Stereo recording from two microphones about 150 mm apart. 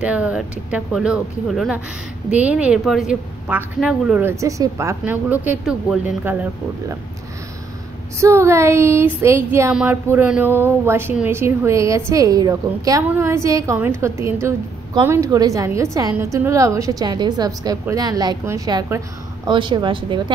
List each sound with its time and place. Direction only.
0.0 s a woman's voice: 10° right (ahead or behind)
4.3 s a woman's voice: 20° right (ahead or behind)
8.2 s a woman's voice: 20° right (ahead or behind)
9.7 s a woman's voice: 5° right (ahead or behind); by 20.3 s 35° right (ahead or behind)